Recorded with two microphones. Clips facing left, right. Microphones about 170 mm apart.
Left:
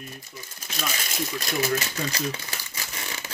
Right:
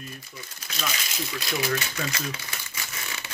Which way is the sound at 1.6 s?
35° left (ahead or behind).